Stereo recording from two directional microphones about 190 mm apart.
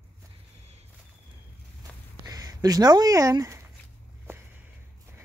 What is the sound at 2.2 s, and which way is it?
Speech, 20° right (ahead or behind).